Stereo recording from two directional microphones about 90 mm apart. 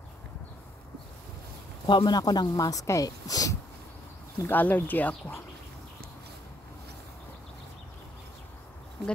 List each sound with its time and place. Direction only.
1.9 s speech: 55° left (ahead or behind)
4.4 s speech: 20° left (ahead or behind)